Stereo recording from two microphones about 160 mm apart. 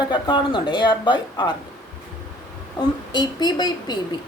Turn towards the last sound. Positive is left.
turn(degrees=25)  # may be behind; listen again after turning